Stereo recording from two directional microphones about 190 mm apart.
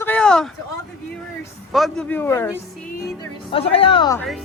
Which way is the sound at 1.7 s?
Centre (ahead or behind).